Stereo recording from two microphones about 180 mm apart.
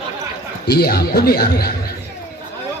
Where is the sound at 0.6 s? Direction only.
60° left (ahead or behind).